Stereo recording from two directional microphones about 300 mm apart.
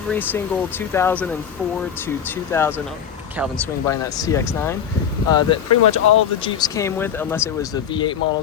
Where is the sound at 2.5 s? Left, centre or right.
Centre.